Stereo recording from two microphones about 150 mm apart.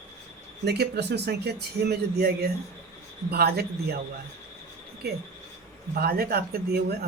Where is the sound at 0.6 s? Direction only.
90° right.